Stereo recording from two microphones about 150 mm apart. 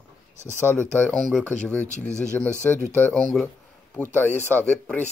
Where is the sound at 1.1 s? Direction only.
Centre (ahead or behind).